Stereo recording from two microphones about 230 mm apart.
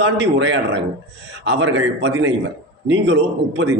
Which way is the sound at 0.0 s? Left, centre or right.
Right.